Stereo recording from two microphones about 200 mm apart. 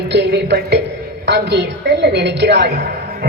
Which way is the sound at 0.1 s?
55° right (ahead or behind).